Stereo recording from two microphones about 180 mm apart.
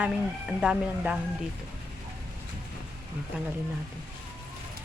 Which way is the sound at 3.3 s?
10° right (ahead or behind).